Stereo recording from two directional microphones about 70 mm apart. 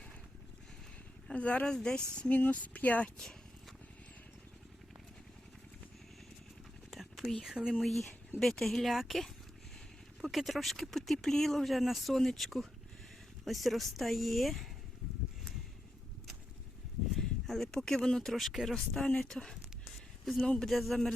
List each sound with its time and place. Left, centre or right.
1.3 s speech: centre
6.9 s whispering: centre
7.4 s speech: centre
17.2 s speech: centre
20.7 s speech: centre